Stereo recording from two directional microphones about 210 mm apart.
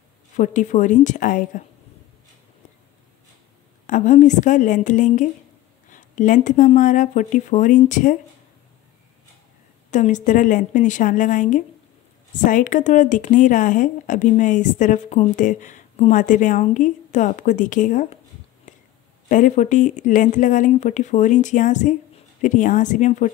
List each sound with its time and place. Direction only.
0.4 s speech: 35° left (ahead or behind)
3.8 s speech: 35° left (ahead or behind)
9.8 s speech: 35° left (ahead or behind)
18.7 s whispering: 35° left (ahead or behind)
19.2 s speech: 35° left (ahead or behind)